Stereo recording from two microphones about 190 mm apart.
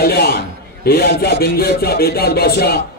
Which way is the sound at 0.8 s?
55° left (ahead or behind).